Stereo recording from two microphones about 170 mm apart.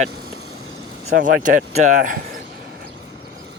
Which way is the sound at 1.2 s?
50° right (ahead or behind).